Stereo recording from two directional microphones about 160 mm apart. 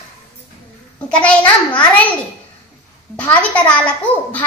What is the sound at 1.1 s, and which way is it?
Speech, 5° left (ahead or behind).